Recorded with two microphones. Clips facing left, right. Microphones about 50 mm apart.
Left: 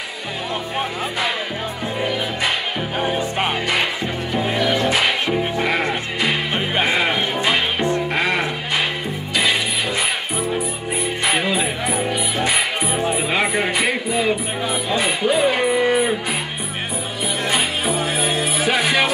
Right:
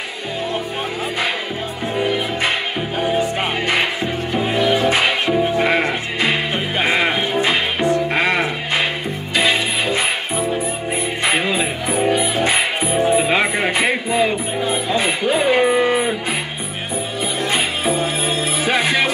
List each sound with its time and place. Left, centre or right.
3.2 s music: right
4.8 s music: right
11.2 s music: right
17.5 s music: right